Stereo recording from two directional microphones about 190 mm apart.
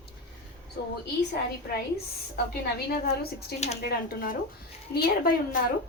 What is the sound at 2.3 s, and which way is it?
A woman's voice, 55° left (ahead or behind).